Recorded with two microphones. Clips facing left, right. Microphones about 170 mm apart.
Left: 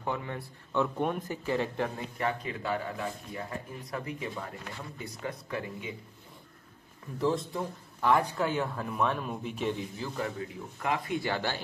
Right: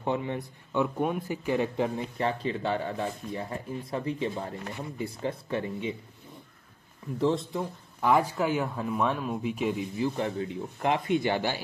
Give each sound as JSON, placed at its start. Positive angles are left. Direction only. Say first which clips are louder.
{"t": 0.0, "sound": "speech", "louder": "right 5 dB", "side_deg": -20}
{"t": 2.1, "sound": "speech", "louder": "right 1 dB", "side_deg": -30}
{"t": 8.0, "sound": "speech", "louder": "right 2 dB", "side_deg": -5}
{"t": 10.0, "sound": "speech", "louder": "right 6 dB", "side_deg": -25}